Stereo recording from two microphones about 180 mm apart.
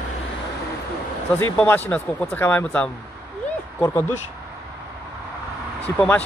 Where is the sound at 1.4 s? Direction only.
10° left (ahead or behind).